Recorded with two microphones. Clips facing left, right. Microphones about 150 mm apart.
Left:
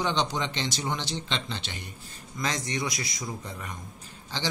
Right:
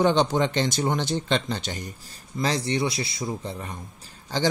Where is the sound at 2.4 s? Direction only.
30° right (ahead or behind).